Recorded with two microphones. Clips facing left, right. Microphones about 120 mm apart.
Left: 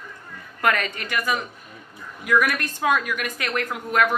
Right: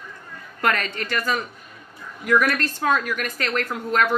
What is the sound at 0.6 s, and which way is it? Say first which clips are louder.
A woman's voice: even; 10° left (ahead or behind).